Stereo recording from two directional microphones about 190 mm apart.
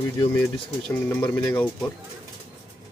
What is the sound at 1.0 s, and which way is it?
Speech, 10° left (ahead or behind).